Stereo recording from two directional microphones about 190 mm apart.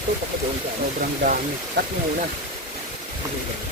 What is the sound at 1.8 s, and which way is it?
Speech, 60° right (ahead or behind).